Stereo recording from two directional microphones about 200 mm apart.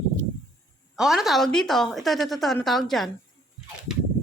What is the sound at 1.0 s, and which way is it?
A woman's voice, centre (ahead or behind).